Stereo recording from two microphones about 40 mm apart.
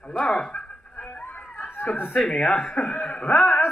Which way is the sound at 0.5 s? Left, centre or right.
Left.